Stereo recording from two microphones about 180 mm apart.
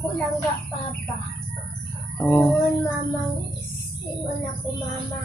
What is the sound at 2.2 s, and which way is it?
Speech, 5° left (ahead or behind).